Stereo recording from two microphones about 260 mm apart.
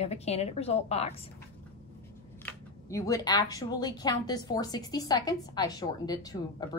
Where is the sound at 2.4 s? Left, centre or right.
Centre.